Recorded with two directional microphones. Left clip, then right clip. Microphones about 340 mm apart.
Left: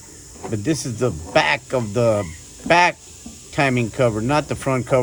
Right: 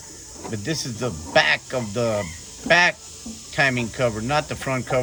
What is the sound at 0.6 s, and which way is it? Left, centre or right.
Speech, centre.